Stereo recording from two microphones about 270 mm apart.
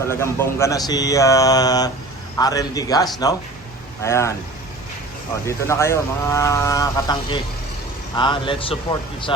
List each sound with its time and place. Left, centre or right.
0.1 s speech: centre
5.5 s speech: centre